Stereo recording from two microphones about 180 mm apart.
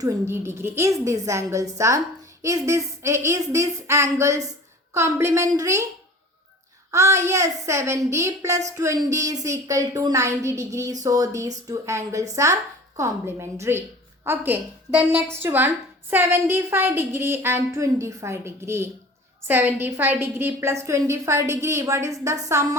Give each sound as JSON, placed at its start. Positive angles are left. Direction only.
{"t": 0.0, "sound": "a woman's voice", "side_deg": -15}
{"t": 6.9, "sound": "a woman's voice", "side_deg": -15}